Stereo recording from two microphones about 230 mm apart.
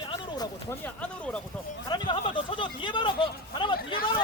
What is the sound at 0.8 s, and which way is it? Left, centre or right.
Speech, centre.